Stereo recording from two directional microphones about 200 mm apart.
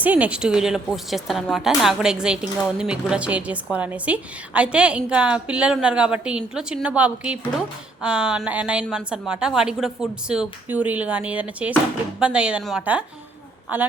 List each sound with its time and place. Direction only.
0.0 s a woman's voice: 5° right (ahead or behind)